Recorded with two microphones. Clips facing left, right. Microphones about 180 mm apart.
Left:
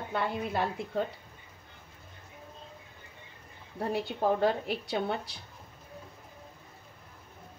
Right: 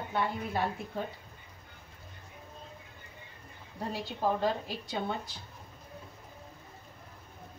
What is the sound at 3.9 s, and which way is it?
A woman's voice, 65° left (ahead or behind).